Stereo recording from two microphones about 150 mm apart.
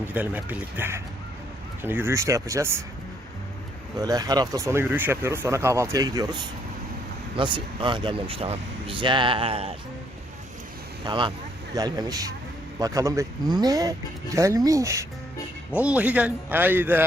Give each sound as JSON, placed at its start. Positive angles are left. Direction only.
{"t": 0.1, "sound": "speech", "side_deg": -10}
{"t": 3.9, "sound": "speech", "side_deg": -25}
{"t": 11.0, "sound": "speech", "side_deg": -30}
{"t": 15.8, "sound": "speech", "side_deg": -10}